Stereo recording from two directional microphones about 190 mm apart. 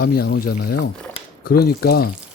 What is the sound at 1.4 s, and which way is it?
Speech, 50° left (ahead or behind).